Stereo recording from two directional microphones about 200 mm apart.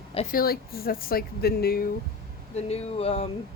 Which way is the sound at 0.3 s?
45° left (ahead or behind).